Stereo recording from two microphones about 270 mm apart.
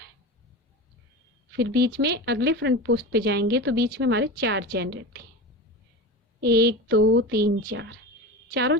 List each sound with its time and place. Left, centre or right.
1.5 s speech: right
6.4 s speech: right